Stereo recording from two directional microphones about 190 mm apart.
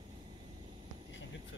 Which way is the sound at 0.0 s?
30° right (ahead or behind).